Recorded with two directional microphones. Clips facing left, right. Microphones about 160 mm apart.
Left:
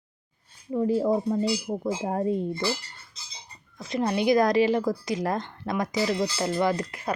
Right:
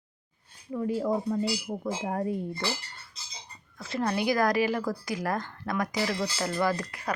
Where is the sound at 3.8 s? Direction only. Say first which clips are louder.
Left 3 dB; 20° left (ahead or behind).